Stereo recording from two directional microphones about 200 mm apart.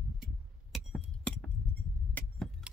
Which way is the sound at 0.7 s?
Centre (ahead or behind).